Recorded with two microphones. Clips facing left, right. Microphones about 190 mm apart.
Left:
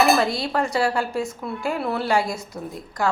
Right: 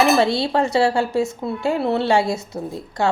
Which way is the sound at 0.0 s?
25° right (ahead or behind).